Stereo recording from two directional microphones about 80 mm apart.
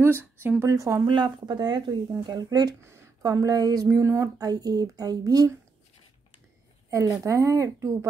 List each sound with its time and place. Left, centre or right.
0.2 s speech: right
0.7 s speech: right
1.0 s speech: right
2.9 s a sound: right
3.3 s speech: right
6.9 s speech: right